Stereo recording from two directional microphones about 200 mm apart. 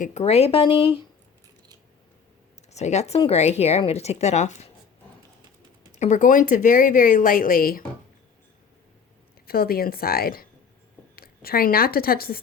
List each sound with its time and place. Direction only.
0.0 s speech: 35° left (ahead or behind)
2.7 s speech: 35° left (ahead or behind)
6.0 s speech: 40° left (ahead or behind)
9.5 s speech: 50° left (ahead or behind)